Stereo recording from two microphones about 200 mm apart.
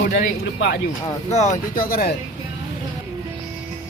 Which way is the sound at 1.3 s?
35° left (ahead or behind).